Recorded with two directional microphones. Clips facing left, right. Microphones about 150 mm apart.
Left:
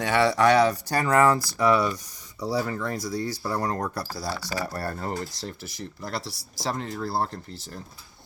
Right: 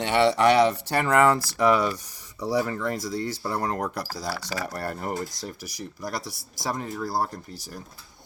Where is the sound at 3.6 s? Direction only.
35° left (ahead or behind).